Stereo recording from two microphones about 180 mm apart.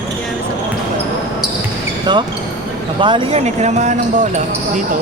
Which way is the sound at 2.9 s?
30° right (ahead or behind).